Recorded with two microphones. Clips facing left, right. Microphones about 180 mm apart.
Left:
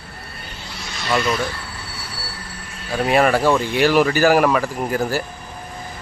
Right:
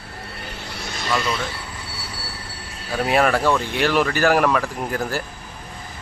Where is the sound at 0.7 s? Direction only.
55° right (ahead or behind).